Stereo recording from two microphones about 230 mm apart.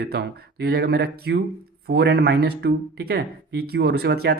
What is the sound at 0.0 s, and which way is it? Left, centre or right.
Speech, right.